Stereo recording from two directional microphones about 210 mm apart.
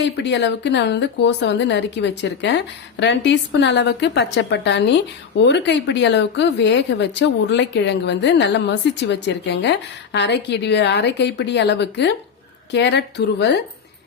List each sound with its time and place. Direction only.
0.0 s speech: 55° left (ahead or behind)